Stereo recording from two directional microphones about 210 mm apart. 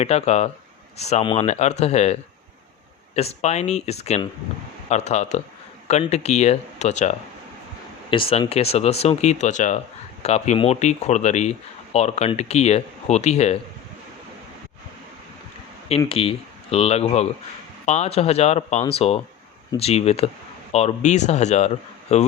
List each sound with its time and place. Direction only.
0.0 s speech: 30° left (ahead or behind)
3.2 s speech: 30° left (ahead or behind)
16.0 s speech: 25° left (ahead or behind)